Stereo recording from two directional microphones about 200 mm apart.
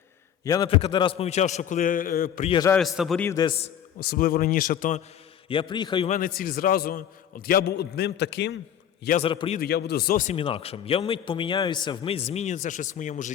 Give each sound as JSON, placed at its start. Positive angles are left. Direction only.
{"t": 0.4, "sound": "a man's voice", "side_deg": 20}
{"t": 2.5, "sound": "a man's voice", "side_deg": 20}
{"t": 2.7, "sound": "a man's voice", "side_deg": 0}
{"t": 3.2, "sound": "a man's voice", "side_deg": 20}
{"t": 4.1, "sound": "a man's voice", "side_deg": 45}
{"t": 5.5, "sound": "a man's voice", "side_deg": 25}
{"t": 6.1, "sound": "a man's voice", "side_deg": 45}
{"t": 9.0, "sound": "a man's voice", "side_deg": 35}
{"t": 9.3, "sound": "a man's voice", "side_deg": 25}
{"t": 9.6, "sound": "a man's voice", "side_deg": 55}
{"t": 10.3, "sound": "a man's voice", "side_deg": 25}